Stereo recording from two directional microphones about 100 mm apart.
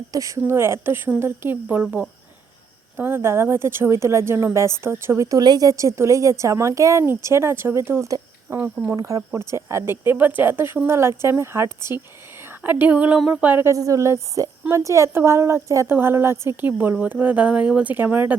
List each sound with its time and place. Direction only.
0.1 s a woman's voice: 35° right (ahead or behind)
1.6 s a woman's voice: 10° right (ahead or behind); by 5.4 s 30° right (ahead or behind)
5.4 s a woman's voice: 40° right (ahead or behind); by 12.0 s 25° right (ahead or behind)
12.8 s speech: 15° right (ahead or behind)
13.1 s a sound: 5° right (ahead or behind)
13.4 s a woman's voice: 20° right (ahead or behind)
13.7 s a woman's voice: 35° right (ahead or behind); by 18.3 s 20° right (ahead or behind)